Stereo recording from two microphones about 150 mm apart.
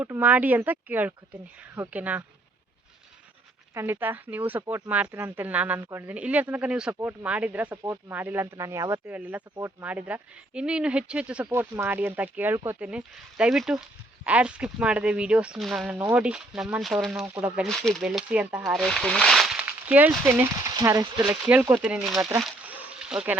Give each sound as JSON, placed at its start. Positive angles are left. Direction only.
{"t": 0.0, "sound": "speech", "side_deg": -10}
{"t": 3.8, "sound": "speech", "side_deg": -15}
{"t": 18.6, "sound": "speech", "side_deg": 0}
{"t": 21.4, "sound": "speech", "side_deg": -10}
{"t": 22.2, "sound": "speech", "side_deg": -20}
{"t": 22.4, "sound": "a sound", "side_deg": -10}